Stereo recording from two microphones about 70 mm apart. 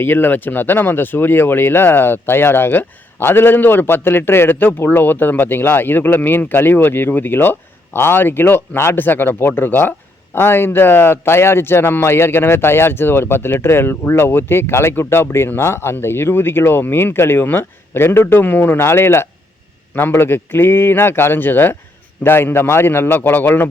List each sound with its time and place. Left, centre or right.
0.0 s speech: left